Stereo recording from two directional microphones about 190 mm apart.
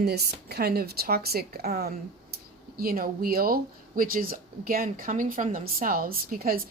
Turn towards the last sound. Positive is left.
turn(degrees=-50)  # may be behind; listen again after turning